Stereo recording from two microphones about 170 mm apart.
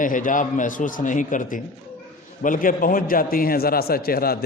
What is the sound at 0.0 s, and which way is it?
A man's voice, 50° left (ahead or behind).